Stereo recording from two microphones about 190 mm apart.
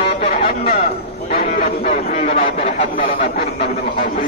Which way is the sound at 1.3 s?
45° left (ahead or behind).